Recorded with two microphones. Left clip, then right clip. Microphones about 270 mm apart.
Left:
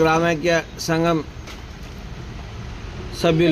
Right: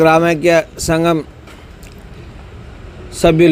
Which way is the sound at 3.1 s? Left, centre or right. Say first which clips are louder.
Right 7 dB; right.